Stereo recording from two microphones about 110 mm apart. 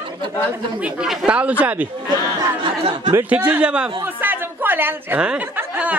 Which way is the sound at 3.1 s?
15° right (ahead or behind).